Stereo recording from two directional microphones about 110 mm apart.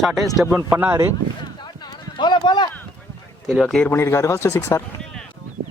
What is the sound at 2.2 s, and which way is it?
Speech, 45° left (ahead or behind).